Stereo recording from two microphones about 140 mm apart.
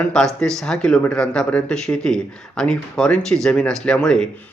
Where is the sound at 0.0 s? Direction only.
5° left (ahead or behind).